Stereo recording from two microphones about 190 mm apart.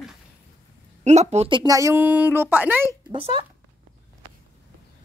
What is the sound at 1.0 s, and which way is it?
A woman's voice, 35° right (ahead or behind).